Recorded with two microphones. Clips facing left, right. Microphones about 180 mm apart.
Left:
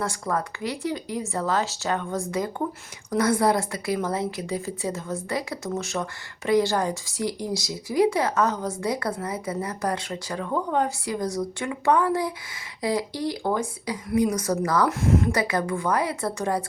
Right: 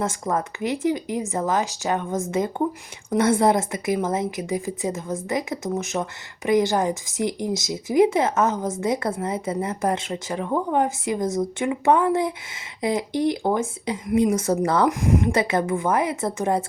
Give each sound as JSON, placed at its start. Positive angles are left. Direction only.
{"t": 0.0, "sound": "a woman's voice", "side_deg": -20}
{"t": 14.8, "sound": "a woman's voice", "side_deg": -15}